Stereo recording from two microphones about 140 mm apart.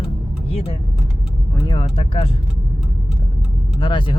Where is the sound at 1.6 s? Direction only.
40° left (ahead or behind).